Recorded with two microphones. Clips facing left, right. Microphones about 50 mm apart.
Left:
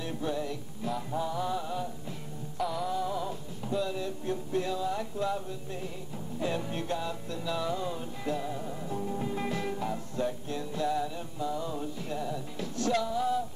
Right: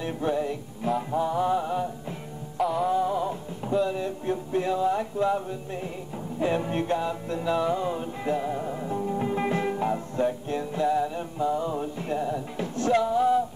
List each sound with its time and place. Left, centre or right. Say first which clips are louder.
0.0 s music: right 6 dB; right